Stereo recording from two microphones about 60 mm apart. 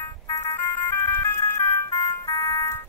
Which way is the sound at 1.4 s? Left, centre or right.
Left.